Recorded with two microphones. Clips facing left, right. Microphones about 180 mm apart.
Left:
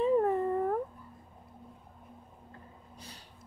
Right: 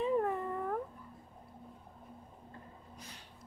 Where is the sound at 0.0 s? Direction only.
35° left (ahead or behind).